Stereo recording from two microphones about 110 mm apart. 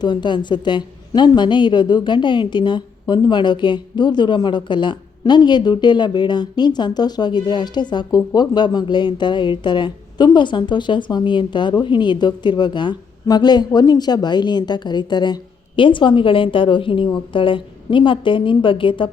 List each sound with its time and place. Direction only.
0.0 s a woman's voice: 45° left (ahead or behind)